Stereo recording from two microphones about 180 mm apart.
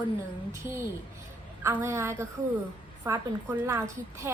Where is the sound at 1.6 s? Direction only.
15° right (ahead or behind).